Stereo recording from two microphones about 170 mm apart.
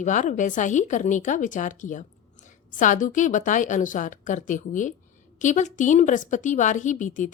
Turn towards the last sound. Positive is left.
turn(degrees=50)  # may be behind; listen again after turning